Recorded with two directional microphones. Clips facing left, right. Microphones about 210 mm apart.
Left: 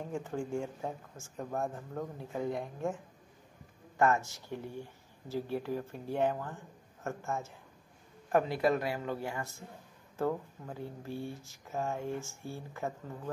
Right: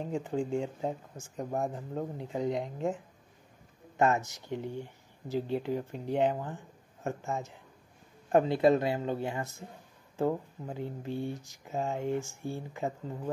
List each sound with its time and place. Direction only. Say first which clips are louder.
0.0 s speech: right 4 dB; 20° right (ahead or behind)